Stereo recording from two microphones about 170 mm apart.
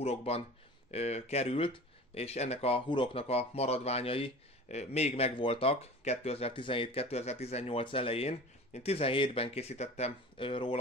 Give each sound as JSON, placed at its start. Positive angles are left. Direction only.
{"t": 0.0, "sound": "speech", "side_deg": 35}